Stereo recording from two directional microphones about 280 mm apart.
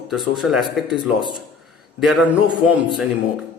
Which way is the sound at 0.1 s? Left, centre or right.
Centre.